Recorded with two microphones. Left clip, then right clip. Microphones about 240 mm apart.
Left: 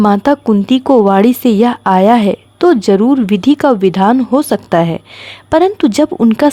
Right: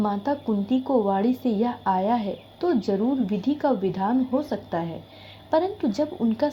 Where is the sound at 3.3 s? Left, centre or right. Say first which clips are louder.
Left 15 dB; left.